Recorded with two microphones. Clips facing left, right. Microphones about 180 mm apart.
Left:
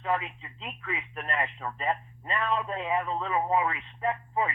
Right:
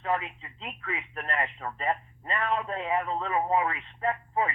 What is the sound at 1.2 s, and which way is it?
Speech, 25° right (ahead or behind).